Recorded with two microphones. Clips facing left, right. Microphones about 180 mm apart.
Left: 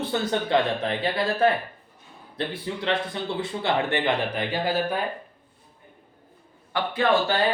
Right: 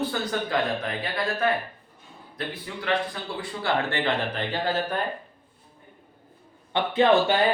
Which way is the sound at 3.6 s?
15° left (ahead or behind).